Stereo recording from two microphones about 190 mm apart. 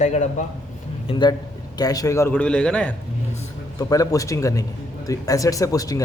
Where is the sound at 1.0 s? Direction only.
25° left (ahead or behind); by 2.9 s 5° left (ahead or behind).